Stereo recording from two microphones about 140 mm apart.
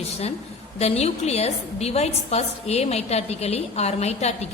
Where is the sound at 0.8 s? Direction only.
50° left (ahead or behind).